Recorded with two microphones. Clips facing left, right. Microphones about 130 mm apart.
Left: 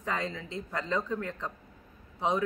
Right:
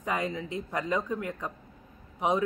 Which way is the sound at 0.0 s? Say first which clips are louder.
Right 3 dB; 15° right (ahead or behind).